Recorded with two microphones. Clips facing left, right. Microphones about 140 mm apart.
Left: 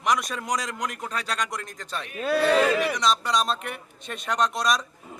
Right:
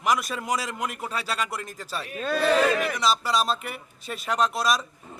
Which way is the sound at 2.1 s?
5° left (ahead or behind).